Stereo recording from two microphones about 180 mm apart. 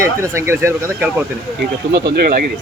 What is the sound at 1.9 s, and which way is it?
Speech, 65° right (ahead or behind).